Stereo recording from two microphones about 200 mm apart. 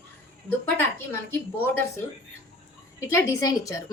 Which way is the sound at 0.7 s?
10° left (ahead or behind).